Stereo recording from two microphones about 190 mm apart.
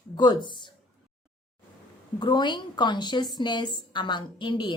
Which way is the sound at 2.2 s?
25° left (ahead or behind).